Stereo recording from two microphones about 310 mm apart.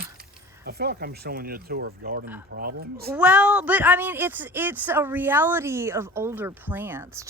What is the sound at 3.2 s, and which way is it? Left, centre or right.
Speech, centre.